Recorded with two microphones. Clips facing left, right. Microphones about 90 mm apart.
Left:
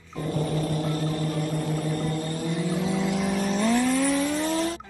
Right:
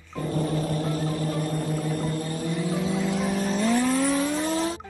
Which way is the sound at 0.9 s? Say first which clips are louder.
Even; 40° right (ahead or behind).